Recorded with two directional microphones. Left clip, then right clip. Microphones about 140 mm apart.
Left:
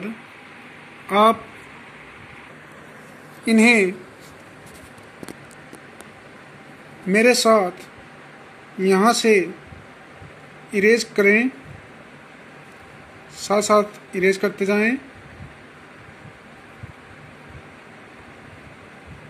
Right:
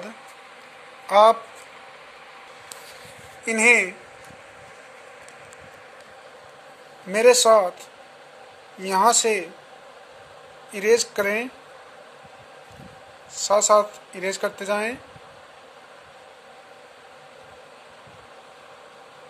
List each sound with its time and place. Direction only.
1.1 s speech: 20° right (ahead or behind)
3.4 s speech: centre (ahead or behind)
7.1 s speech: 15° right (ahead or behind)
8.8 s speech: 15° right (ahead or behind)
10.7 s speech: 15° right (ahead or behind)
13.5 s speech: 15° right (ahead or behind)